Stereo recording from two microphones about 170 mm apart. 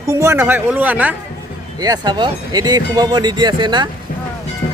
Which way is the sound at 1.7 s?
20° right (ahead or behind).